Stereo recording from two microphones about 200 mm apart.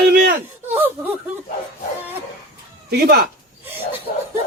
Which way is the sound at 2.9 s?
50° right (ahead or behind).